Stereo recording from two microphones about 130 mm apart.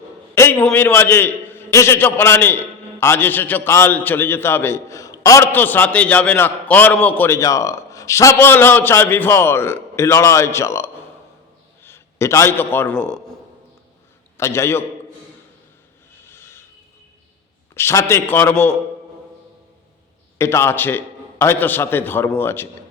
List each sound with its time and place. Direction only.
0.3 s a man's voice: 15° left (ahead or behind)
14.3 s a man's voice: 20° left (ahead or behind)
16.2 s a sound: 20° left (ahead or behind)
17.7 s a man's voice: 20° left (ahead or behind)
20.4 s a man's voice: 20° left (ahead or behind)